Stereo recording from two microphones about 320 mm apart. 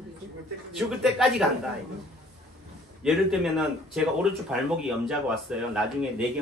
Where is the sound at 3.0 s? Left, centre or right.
Centre.